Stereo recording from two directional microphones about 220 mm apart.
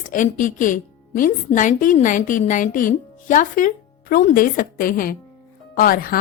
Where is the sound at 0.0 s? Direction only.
35° left (ahead or behind).